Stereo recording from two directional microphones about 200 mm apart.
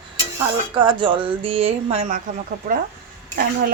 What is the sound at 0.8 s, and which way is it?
Speech, 25° right (ahead or behind).